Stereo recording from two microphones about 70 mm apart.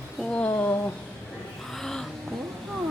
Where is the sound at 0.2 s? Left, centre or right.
Left.